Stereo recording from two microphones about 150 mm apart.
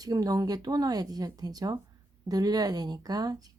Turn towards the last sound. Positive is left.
turn(degrees=-25)  # may be behind; listen again after turning